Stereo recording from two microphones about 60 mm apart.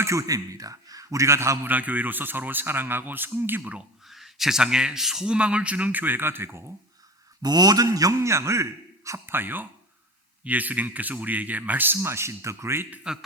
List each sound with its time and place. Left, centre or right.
0.0 s a man's voice: right
1.6 s speech: right
4.0 s a man's voice: centre; by 6.7 s right
7.6 s a man's voice: right
8.3 s speech: right
9.3 s speech: right
12.0 s speech: right
13.1 s a man's voice: centre